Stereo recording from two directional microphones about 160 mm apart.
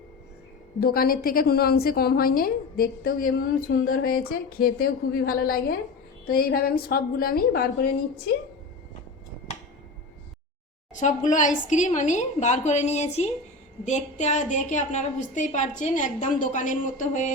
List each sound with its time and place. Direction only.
0.8 s a woman's voice: 70° left (ahead or behind)
10.9 s a woman's voice: 50° left (ahead or behind)